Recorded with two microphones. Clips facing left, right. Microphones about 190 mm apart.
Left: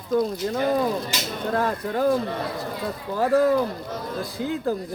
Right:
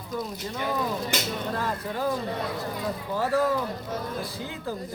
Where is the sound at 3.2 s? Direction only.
50° left (ahead or behind).